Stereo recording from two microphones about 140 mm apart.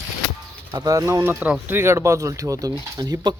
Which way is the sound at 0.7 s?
25° right (ahead or behind).